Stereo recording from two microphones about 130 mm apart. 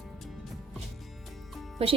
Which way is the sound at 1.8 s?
50° right (ahead or behind).